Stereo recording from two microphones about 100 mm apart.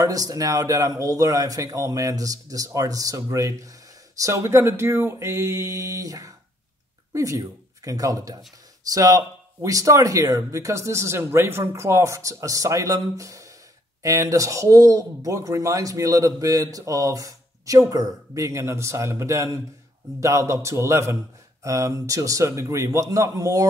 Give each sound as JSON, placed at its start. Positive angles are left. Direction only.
{"t": 0.0, "sound": "a man's voice", "side_deg": -35}